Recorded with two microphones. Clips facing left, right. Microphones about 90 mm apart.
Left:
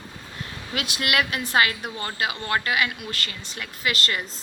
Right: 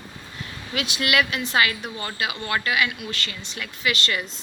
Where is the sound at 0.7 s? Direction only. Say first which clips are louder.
Right 2 dB; 45° left (ahead or behind).